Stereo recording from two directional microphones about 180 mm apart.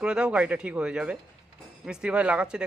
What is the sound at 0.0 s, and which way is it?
Speech, 5° right (ahead or behind).